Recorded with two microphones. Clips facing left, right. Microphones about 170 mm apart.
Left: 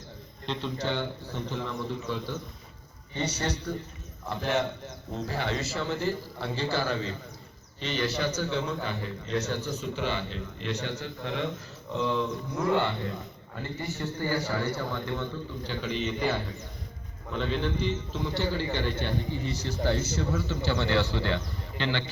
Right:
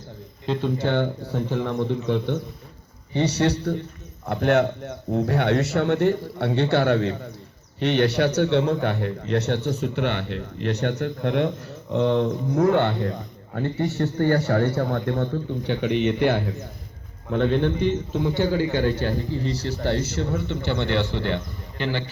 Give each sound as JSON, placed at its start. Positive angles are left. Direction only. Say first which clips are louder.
{"t": 0.5, "sound": "a man's voice", "louder": "right 8 dB", "side_deg": -50}
{"t": 18.9, "sound": "a man's voice", "louder": "right 7 dB", "side_deg": -5}
{"t": 19.6, "sound": "a man's voice", "louder": "right 2 dB", "side_deg": -75}
{"t": 20.1, "sound": "a man's voice", "louder": "right 4 dB", "side_deg": -25}